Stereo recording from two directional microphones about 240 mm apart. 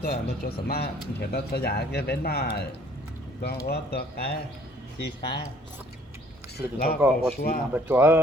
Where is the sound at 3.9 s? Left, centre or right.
Left.